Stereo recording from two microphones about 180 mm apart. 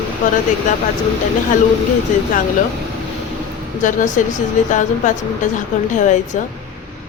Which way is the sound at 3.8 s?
45° left (ahead or behind).